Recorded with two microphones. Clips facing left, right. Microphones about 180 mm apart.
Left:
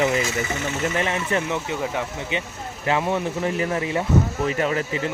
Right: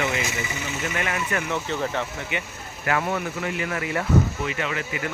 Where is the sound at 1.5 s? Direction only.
10° left (ahead or behind).